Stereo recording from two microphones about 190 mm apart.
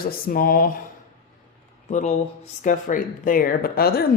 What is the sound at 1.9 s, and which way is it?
Speech, 35° left (ahead or behind).